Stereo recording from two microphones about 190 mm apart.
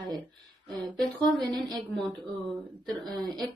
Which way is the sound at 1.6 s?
25° right (ahead or behind).